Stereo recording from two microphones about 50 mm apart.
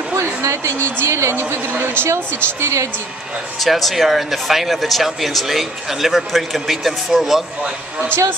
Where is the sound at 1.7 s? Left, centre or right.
Right.